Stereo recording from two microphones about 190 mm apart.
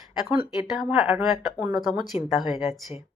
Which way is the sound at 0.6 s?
5° right (ahead or behind).